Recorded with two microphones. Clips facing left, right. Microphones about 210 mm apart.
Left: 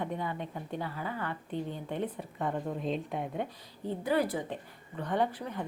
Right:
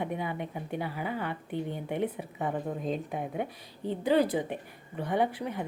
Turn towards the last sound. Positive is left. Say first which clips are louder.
# right 2 dB
turn(degrees=-10)  # may be behind; listen again after turning